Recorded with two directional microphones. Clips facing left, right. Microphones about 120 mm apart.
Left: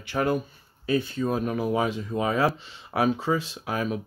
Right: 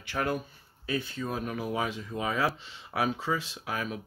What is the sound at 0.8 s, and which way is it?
Speech, 35° left (ahead or behind).